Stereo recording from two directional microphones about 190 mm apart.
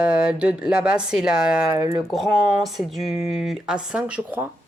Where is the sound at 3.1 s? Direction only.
35° left (ahead or behind).